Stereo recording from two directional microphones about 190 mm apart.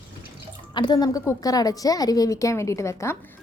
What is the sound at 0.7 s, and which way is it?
A woman's voice, 25° left (ahead or behind).